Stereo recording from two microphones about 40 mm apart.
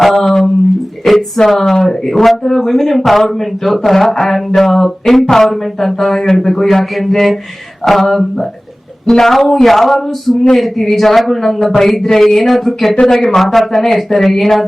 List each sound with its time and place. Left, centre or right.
0.3 s a sound: centre
1.0 s speech: centre
12.0 s speech: centre
12.4 s speech: centre
13.0 s speech: centre
13.4 s speech: centre